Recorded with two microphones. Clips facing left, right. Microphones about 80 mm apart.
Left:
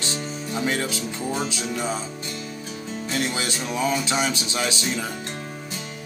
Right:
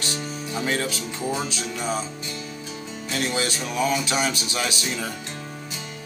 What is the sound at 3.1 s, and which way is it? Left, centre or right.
Music, left.